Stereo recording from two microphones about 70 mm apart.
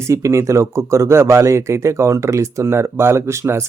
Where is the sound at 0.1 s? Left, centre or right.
Right.